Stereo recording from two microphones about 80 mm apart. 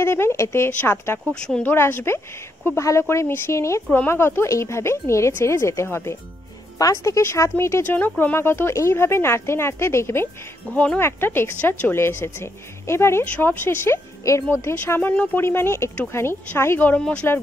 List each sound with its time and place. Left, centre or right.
0.0 s speech: left
1.3 s speech: centre
1.7 s speech: left
6.8 s speech: left
7.8 s speech: left
10.7 s speech: centre
11.0 s speech: left
13.2 s speech: left
15.0 s speech: left
17.0 s speech: centre